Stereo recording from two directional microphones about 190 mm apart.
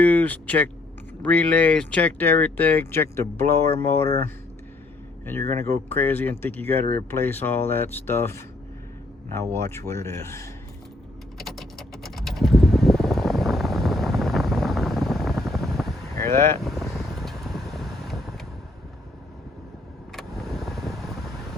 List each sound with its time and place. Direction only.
0.0 s speech: 10° left (ahead or behind)
11.3 s typing: centre (ahead or behind)
16.1 s boat: 15° left (ahead or behind)
16.6 s vehicle: centre (ahead or behind)
20.1 s vehicle: centre (ahead or behind)